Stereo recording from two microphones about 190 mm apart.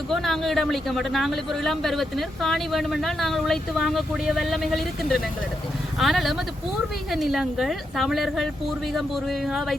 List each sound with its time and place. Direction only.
0.1 s speech: centre (ahead or behind)